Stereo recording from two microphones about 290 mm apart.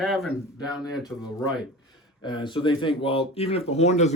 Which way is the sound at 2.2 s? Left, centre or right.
Centre.